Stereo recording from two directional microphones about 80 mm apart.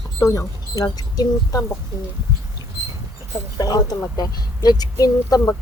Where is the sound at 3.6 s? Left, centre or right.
Left.